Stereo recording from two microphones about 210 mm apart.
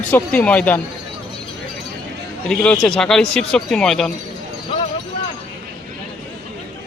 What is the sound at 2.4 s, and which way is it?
Speech, 5° left (ahead or behind).